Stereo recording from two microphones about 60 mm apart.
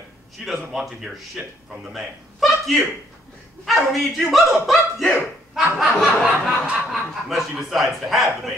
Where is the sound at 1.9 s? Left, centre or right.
Centre.